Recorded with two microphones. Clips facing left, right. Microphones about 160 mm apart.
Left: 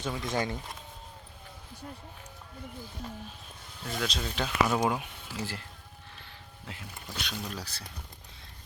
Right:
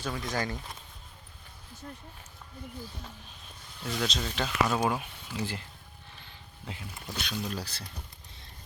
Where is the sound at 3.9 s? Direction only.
5° left (ahead or behind).